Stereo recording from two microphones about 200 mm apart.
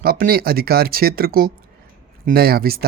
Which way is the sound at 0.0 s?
50° right (ahead or behind).